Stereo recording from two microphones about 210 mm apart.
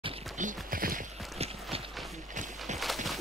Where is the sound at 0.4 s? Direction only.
40° right (ahead or behind).